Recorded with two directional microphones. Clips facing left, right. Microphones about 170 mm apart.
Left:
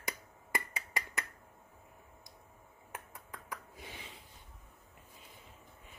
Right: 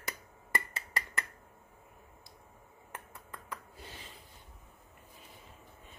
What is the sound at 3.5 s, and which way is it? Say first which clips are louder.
Gasp: even; 10° left (ahead or behind).